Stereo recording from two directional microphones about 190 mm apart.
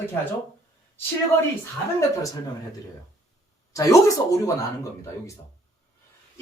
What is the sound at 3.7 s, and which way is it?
Speech, 15° left (ahead or behind).